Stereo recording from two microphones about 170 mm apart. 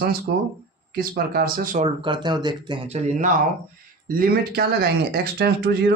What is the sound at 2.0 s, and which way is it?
Speech, 25° right (ahead or behind).